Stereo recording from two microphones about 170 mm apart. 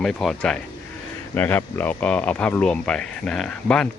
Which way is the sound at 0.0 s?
Centre (ahead or behind).